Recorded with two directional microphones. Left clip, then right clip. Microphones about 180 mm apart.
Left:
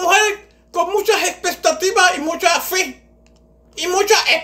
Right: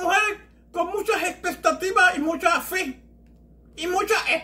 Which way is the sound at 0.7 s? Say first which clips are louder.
Left 8 dB; 10° left (ahead or behind).